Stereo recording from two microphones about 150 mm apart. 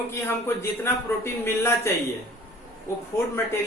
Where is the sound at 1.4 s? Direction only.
15° left (ahead or behind).